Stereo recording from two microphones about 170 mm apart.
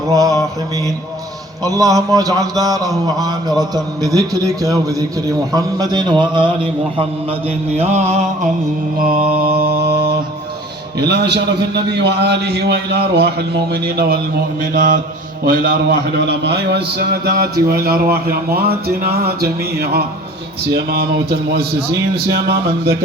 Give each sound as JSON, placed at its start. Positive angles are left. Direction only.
{"t": 0.1, "sound": "a man's voice", "side_deg": -20}
{"t": 1.6, "sound": "a man's voice", "side_deg": -20}
{"t": 7.8, "sound": "a sound", "side_deg": -40}
{"t": 9.0, "sound": "mantra", "side_deg": -55}
{"t": 11.0, "sound": "a man's voice", "side_deg": -75}
{"t": 14.7, "sound": "mantra", "side_deg": -55}
{"t": 15.4, "sound": "a man's voice", "side_deg": -55}